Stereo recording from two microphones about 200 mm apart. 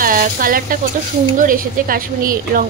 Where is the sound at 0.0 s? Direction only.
45° right (ahead or behind).